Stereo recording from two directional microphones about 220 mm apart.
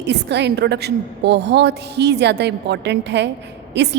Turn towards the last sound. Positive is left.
turn(degrees=-50)  # may be behind; listen again after turning